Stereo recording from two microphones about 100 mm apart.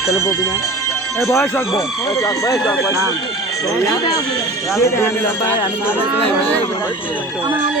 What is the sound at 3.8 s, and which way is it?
Speech, 35° left (ahead or behind).